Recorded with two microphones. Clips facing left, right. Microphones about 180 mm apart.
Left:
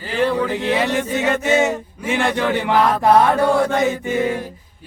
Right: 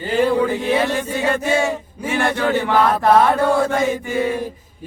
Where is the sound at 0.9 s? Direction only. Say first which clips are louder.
Left 1 dB; 15° left (ahead or behind).